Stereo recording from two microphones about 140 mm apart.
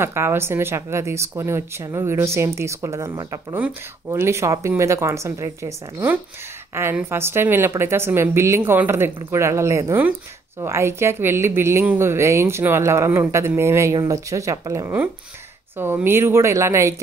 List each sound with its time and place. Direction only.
0.0 s speech: 15° right (ahead or behind)